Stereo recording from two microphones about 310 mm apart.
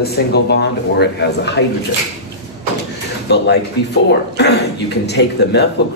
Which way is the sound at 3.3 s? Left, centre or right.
Left.